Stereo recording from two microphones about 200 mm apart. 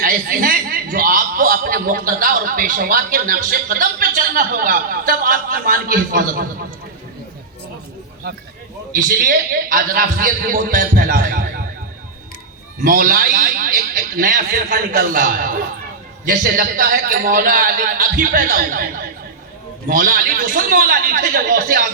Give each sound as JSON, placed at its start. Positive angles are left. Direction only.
{"t": 0.0, "sound": "a man's voice", "side_deg": -45}
{"t": 8.9, "sound": "a man's voice", "side_deg": -45}
{"t": 12.8, "sound": "a man's voice", "side_deg": -45}